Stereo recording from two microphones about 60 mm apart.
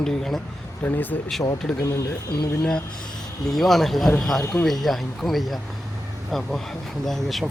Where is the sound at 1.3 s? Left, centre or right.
Centre.